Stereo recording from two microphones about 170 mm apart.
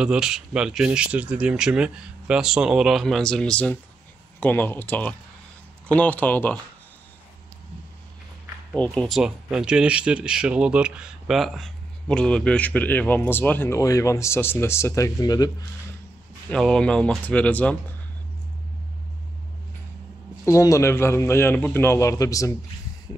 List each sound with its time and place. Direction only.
0.0 s speech: 5° right (ahead or behind)
8.7 s speech: 5° left (ahead or behind); by 15.5 s 25° left (ahead or behind)
16.4 s speech: 5° left (ahead or behind)
20.4 s speech: 20° left (ahead or behind)